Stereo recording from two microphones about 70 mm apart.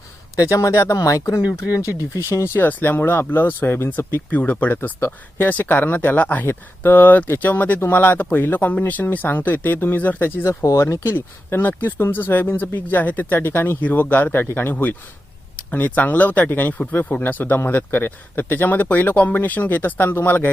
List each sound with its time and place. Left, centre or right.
0.3 s speech: left
1.9 s speech: right
2.6 s speech: left
10.4 s speech: left
11.1 s speech: left